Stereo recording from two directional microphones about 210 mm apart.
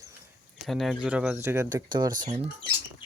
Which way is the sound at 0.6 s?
Centre (ahead or behind).